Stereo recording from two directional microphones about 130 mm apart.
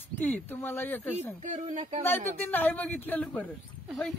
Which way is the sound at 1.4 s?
65° right (ahead or behind).